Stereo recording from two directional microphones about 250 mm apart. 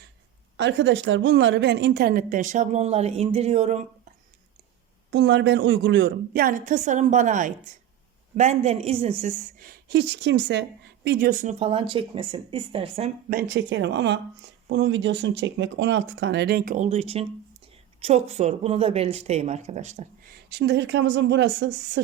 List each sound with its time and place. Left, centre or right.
0.5 s a woman's voice: right
5.1 s a woman's voice: right
13.3 s a woman's voice: right
20.5 s speech: right